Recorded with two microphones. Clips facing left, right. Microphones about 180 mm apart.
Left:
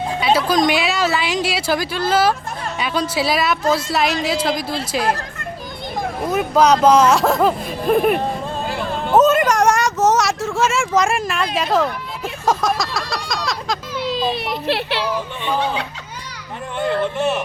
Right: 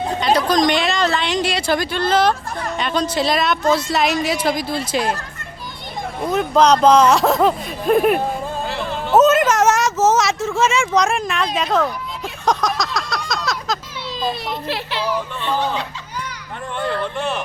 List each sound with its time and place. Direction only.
0.2 s a woman's voice: 5° left (ahead or behind)
6.3 s a woman's voice: 5° left (ahead or behind)
9.1 s a sound: centre (ahead or behind)
11.5 s speech: centre (ahead or behind)
14.7 s a child's voice: 70° left (ahead or behind)
17.2 s a woman's voice: 5° left (ahead or behind)